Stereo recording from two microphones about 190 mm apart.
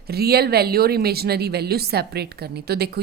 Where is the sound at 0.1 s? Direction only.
55° right (ahead or behind).